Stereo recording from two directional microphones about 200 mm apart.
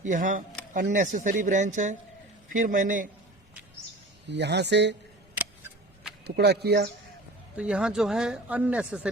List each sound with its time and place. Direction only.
0.0 s speech: 40° right (ahead or behind)
4.3 s speech: 60° right (ahead or behind)
6.2 s speech: 55° right (ahead or behind)
7.5 s speech: 5° right (ahead or behind)